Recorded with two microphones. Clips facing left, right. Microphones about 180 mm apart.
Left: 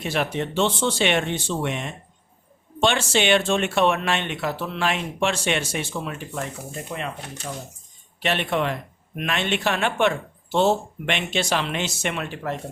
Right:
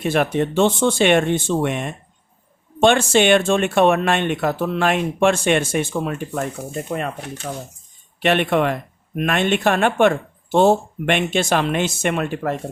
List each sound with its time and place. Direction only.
0.0 s speech: 50° right (ahead or behind)
8.2 s speech: 55° right (ahead or behind)